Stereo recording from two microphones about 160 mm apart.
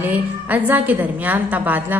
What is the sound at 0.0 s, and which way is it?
A woman's voice, 10° right (ahead or behind).